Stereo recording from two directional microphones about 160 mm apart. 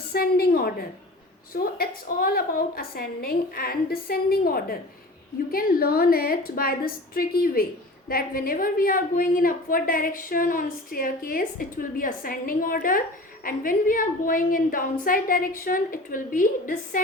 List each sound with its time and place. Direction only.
0.1 s a woman's voice: 70° left (ahead or behind)